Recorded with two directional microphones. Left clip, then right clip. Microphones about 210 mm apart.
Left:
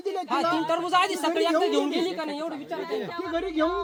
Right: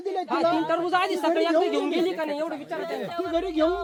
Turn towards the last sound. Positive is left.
turn(degrees=25)  # may be behind; listen again after turning